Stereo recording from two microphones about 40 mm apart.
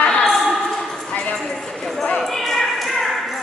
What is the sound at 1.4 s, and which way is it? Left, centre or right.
Speech, centre.